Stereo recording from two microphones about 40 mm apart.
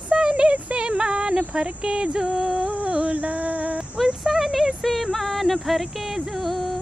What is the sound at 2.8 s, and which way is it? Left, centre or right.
Music, right.